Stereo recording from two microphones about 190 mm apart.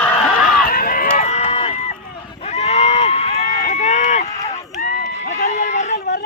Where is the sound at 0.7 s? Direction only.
50° left (ahead or behind).